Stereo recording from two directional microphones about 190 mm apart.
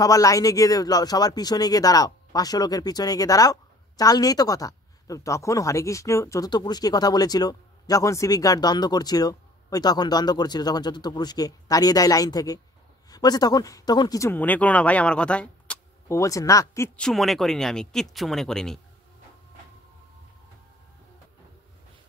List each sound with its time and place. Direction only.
0.0 s speech: 20° left (ahead or behind); by 18.8 s centre (ahead or behind)